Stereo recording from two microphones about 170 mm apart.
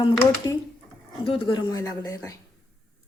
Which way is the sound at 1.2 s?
30° left (ahead or behind).